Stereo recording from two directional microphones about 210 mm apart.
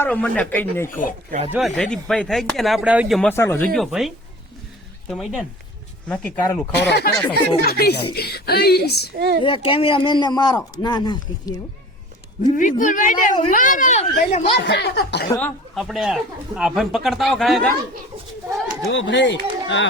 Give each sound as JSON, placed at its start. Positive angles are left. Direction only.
{"t": 0.0, "sound": "speech", "side_deg": 5}
{"t": 3.2, "sound": "speech", "side_deg": 10}
{"t": 3.8, "sound": "speech", "side_deg": 0}
{"t": 6.7, "sound": "speech", "side_deg": 50}
{"t": 9.1, "sound": "a woman's voice", "side_deg": -50}
{"t": 9.4, "sound": "speech", "side_deg": 25}
{"t": 12.4, "sound": "speech", "side_deg": 40}
{"t": 14.5, "sound": "speech", "side_deg": 55}
{"t": 15.3, "sound": "speech", "side_deg": 10}
{"t": 18.9, "sound": "speech", "side_deg": 60}